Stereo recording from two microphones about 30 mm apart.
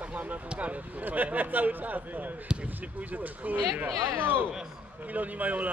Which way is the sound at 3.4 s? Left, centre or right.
Right.